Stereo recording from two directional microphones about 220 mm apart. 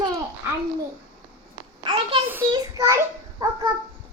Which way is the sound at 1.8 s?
25° right (ahead or behind).